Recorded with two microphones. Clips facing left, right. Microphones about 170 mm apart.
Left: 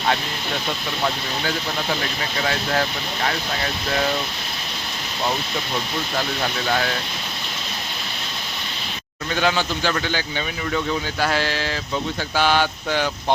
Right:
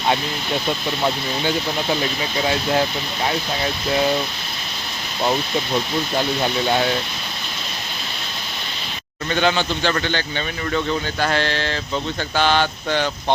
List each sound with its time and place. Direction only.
1.0 s speech: 20° right (ahead or behind)
6.7 s speech: 25° right (ahead or behind)
9.3 s a man's voice: 5° left (ahead or behind)
12.4 s a sound: 10° left (ahead or behind)